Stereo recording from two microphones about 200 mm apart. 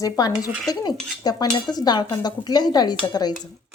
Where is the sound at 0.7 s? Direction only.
20° left (ahead or behind).